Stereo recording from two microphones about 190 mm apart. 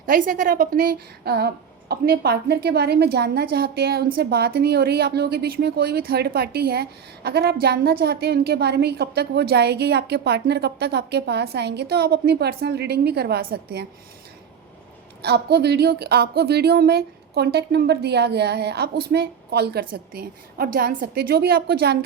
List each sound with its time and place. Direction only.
0.0 s a woman's voice: 45° right (ahead or behind)
15.2 s a woman's voice: 60° right (ahead or behind)